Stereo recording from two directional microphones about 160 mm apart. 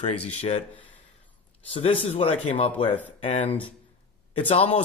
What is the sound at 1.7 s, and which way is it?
Speech, 35° left (ahead or behind).